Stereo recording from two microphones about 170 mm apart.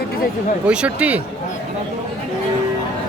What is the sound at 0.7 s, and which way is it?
Speech, 5° right (ahead or behind).